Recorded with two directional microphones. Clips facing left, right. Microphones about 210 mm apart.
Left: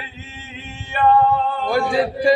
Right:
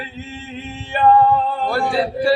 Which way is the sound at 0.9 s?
35° right (ahead or behind).